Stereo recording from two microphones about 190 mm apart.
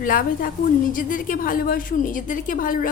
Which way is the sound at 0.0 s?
45° left (ahead or behind).